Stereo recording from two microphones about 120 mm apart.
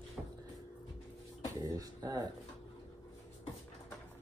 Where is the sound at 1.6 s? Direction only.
30° right (ahead or behind).